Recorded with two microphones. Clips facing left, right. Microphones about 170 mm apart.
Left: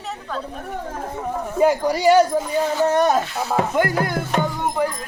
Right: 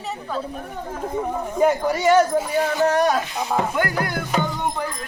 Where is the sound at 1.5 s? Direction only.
10° left (ahead or behind).